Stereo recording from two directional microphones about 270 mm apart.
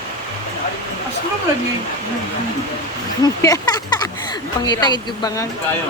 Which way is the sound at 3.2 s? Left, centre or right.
Centre.